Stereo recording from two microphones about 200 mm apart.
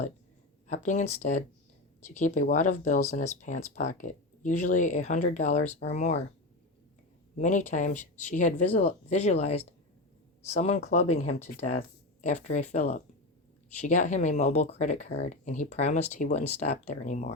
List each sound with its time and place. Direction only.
0.7 s speech: 35° left (ahead or behind)
7.3 s speech: 35° left (ahead or behind)